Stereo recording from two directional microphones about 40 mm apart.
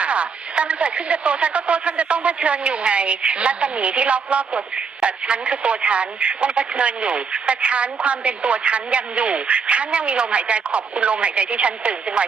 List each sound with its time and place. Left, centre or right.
0.0 s speech: right